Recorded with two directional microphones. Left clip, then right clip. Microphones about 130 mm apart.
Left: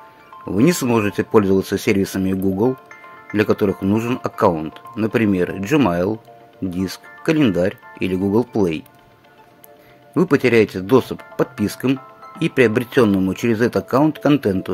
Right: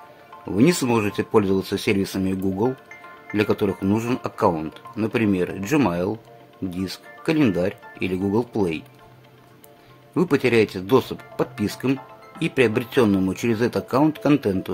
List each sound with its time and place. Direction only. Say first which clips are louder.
0.5 s speech: left 2 dB; 30° left (ahead or behind)
4.6 s speech: left 3 dB; 15° left (ahead or behind)
5.0 s speech: left 4 dB; 25° left (ahead or behind)
10.1 s speech: left 4 dB; 25° left (ahead or behind)